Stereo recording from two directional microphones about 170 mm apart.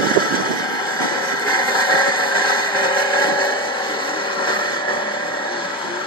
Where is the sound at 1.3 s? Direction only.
25° left (ahead or behind).